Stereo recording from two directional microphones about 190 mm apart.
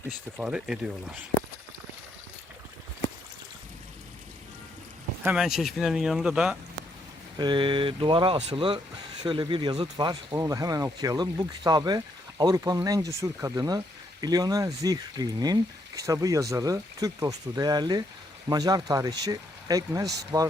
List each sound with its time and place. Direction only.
0.3 s speech: 5° right (ahead or behind)
5.2 s speech: 5° right (ahead or behind)
7.3 s speech: 25° right (ahead or behind)